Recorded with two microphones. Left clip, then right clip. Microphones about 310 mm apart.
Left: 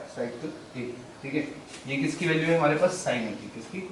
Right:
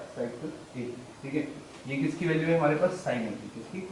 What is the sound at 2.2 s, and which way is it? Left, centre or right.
Speech, centre.